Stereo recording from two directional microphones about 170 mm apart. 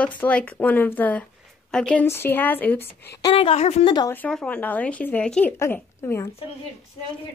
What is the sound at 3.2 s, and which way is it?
Speech, 30° left (ahead or behind).